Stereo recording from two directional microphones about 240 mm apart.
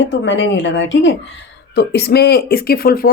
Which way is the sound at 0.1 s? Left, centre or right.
Left.